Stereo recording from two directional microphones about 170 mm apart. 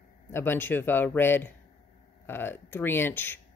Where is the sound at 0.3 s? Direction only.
15° left (ahead or behind).